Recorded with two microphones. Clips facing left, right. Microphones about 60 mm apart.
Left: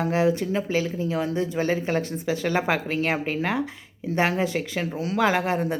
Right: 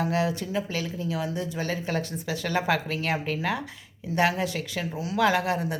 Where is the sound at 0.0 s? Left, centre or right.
Left.